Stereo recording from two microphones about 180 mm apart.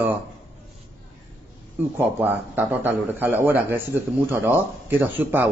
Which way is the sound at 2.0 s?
10° right (ahead or behind).